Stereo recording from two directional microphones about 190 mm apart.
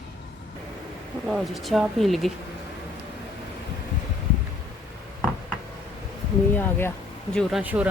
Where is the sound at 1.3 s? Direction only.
Centre (ahead or behind).